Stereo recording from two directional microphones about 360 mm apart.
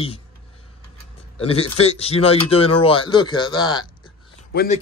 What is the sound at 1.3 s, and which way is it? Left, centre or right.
A man's voice, centre.